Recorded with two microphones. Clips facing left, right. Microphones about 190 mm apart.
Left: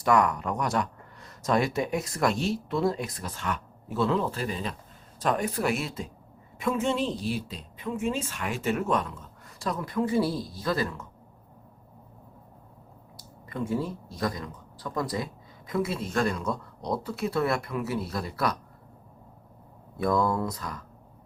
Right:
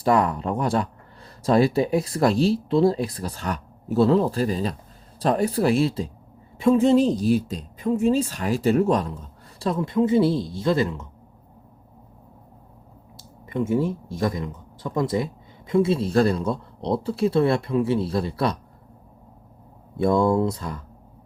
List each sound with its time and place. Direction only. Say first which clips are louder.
0.0 s speech: right 3 dB; 30° right (ahead or behind)
13.1 s speech: right 7 dB; 25° right (ahead or behind)
20.0 s speech: right 6 dB; 25° right (ahead or behind)